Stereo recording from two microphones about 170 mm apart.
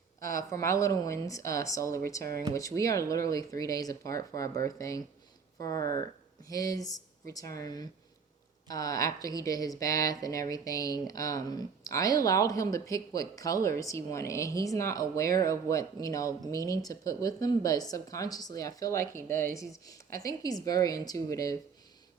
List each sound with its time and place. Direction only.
0.2 s speech: 55° right (ahead or behind)
0.5 s speech: 15° left (ahead or behind)